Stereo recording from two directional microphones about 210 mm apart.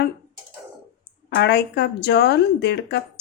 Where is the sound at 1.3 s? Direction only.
50° left (ahead or behind).